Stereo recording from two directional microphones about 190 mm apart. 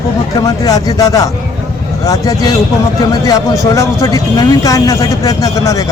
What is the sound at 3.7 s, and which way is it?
Speech, 15° left (ahead or behind).